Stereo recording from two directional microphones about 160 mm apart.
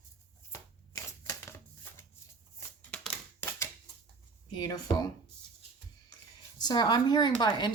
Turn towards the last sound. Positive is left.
turn(degrees=25)  # may be behind; listen again after turning